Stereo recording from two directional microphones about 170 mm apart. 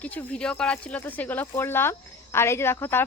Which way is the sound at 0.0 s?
10° left (ahead or behind).